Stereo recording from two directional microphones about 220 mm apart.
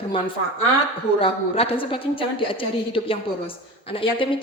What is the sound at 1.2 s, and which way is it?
A woman's voice, 25° left (ahead or behind).